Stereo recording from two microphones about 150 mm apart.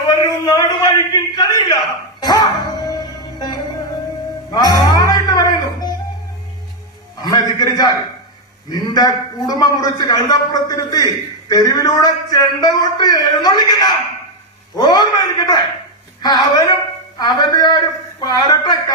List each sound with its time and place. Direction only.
0.1 s a man's voice: 25° left (ahead or behind)
2.2 s music: 25° left (ahead or behind)
4.5 s music: 25° left (ahead or behind)
7.2 s a man's voice: 25° left (ahead or behind)